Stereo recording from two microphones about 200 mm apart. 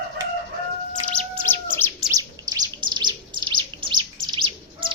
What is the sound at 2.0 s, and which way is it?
Bird, 20° right (ahead or behind).